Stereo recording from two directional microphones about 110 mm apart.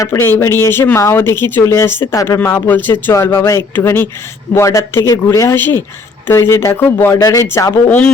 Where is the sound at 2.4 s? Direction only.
20° left (ahead or behind).